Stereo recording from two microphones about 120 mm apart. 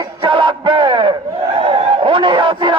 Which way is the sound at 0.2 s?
45° right (ahead or behind).